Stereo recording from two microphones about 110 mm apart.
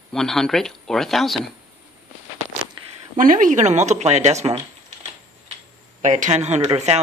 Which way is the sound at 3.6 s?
90° right.